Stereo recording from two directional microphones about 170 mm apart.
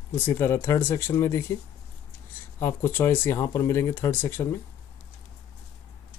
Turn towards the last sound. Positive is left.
turn(degrees=15)  # may be behind; listen again after turning